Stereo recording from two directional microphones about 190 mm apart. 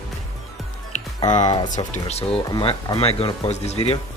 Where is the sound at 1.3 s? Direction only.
40° left (ahead or behind).